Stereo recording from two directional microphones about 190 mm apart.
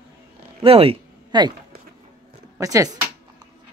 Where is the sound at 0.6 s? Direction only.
30° right (ahead or behind).